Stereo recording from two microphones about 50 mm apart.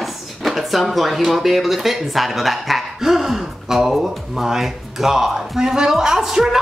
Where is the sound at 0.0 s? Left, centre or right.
Centre.